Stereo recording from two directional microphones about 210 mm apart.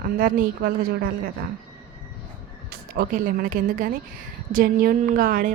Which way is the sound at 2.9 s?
40° right (ahead or behind).